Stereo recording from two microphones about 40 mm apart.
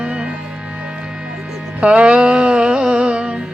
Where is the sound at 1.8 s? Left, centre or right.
Right.